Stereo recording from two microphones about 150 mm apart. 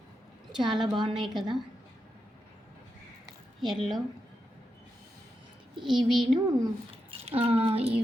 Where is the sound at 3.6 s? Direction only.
Centre (ahead or behind).